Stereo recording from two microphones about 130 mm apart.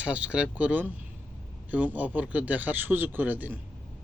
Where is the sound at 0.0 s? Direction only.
10° right (ahead or behind).